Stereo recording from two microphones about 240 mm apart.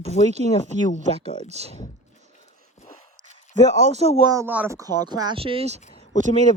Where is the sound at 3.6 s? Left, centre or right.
Right.